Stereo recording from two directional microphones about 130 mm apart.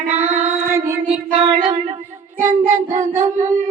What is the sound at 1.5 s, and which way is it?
Child singing, 40° right (ahead or behind).